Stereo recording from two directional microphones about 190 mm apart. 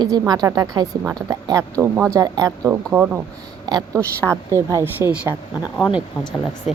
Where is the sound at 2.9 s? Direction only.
10° right (ahead or behind).